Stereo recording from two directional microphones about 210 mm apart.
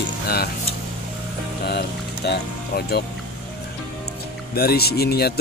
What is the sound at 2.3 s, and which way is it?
Speech, 50° left (ahead or behind).